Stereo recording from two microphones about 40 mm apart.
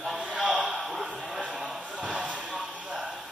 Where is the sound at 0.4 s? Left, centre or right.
Centre.